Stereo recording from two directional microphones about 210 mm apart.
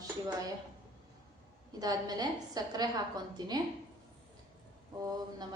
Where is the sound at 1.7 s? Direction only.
20° right (ahead or behind).